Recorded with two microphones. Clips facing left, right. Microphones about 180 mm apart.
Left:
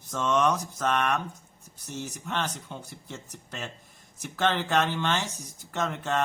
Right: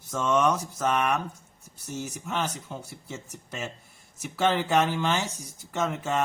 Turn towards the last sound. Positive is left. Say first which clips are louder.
# right 1 dB
turn(degrees=-5)  # may be behind; listen again after turning